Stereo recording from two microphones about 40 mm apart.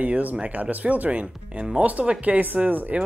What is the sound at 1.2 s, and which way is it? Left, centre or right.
Speech, right.